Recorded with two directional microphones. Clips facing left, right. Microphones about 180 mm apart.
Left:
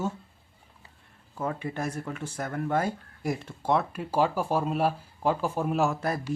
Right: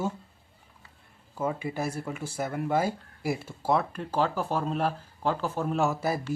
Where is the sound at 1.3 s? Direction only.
5° right (ahead or behind).